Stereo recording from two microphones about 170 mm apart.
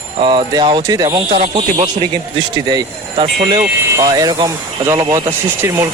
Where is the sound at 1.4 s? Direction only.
35° right (ahead or behind).